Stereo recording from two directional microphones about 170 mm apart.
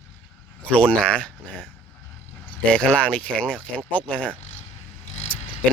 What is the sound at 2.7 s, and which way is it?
Speech, 5° left (ahead or behind).